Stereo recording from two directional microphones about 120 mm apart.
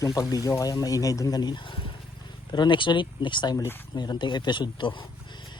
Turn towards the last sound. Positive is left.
turn(degrees=40)  # may be behind; listen again after turning